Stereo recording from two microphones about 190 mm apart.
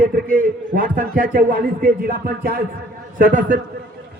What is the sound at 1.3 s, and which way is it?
Speech, 55° right (ahead or behind).